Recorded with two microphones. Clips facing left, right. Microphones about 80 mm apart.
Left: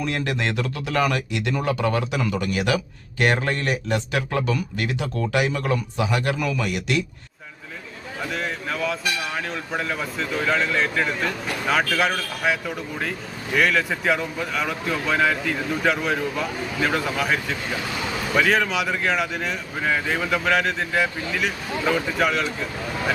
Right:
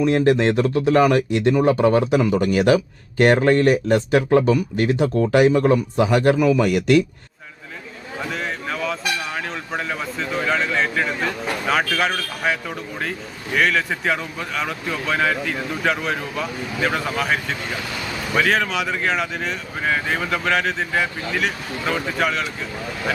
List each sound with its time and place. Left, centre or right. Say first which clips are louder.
0.0 s a man's voice: right 9 dB; right
8.3 s speech: right 1 dB; centre
18.3 s speech: right 1 dB; centre